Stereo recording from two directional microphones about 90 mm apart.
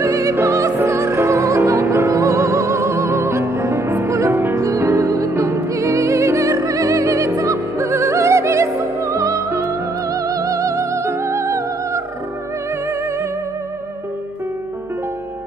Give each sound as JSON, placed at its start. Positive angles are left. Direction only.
{"t": 0.0, "sound": "opera", "side_deg": -35}
{"t": 5.3, "sound": "music", "side_deg": -30}